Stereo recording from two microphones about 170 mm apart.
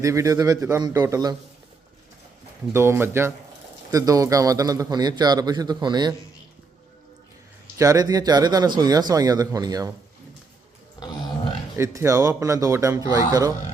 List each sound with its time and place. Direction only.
0.0 s a man's voice: 20° right (ahead or behind)
2.7 s a man's voice: 15° right (ahead or behind)
7.8 s a man's voice: 20° right (ahead or behind)
11.8 s a man's voice: 15° right (ahead or behind)